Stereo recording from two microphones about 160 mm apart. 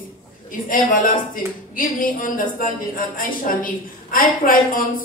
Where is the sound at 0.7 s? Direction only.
60° left (ahead or behind).